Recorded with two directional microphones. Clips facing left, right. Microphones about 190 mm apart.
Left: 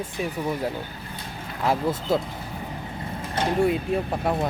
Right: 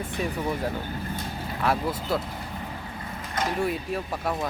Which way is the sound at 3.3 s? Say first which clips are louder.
Left 5 dB; 30° left (ahead or behind).